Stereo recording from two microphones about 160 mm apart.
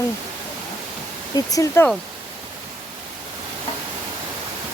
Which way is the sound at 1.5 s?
20° left (ahead or behind).